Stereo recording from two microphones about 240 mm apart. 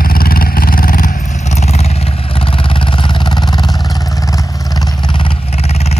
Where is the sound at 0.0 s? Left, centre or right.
Left.